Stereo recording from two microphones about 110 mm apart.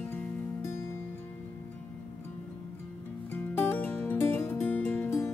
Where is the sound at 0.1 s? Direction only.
20° left (ahead or behind).